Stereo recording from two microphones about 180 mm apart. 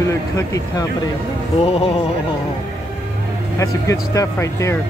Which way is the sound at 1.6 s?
30° left (ahead or behind).